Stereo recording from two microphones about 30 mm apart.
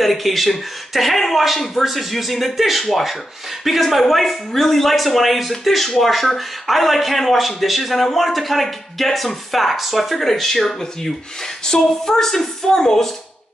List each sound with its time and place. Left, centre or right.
0.0 s a woman's voice: centre